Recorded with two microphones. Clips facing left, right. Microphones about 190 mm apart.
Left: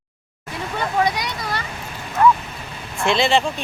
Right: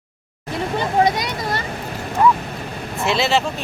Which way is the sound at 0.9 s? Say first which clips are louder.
Right 3 dB; 45° right (ahead or behind).